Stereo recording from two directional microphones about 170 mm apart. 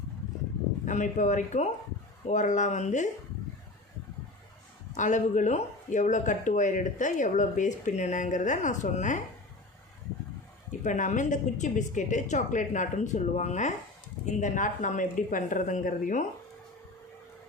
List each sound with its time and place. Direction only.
0.9 s speech: 45° left (ahead or behind)
4.9 s speech: 45° left (ahead or behind)
10.7 s speech: 50° left (ahead or behind)